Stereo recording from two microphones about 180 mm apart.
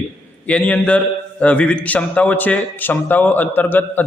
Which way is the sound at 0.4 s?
5° left (ahead or behind).